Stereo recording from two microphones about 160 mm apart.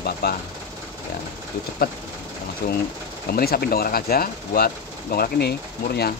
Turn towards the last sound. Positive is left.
turn(degrees=80)